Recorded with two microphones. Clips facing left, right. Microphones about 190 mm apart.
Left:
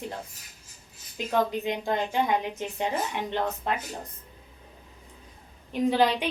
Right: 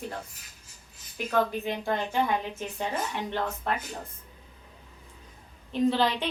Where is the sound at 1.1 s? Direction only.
20° left (ahead or behind).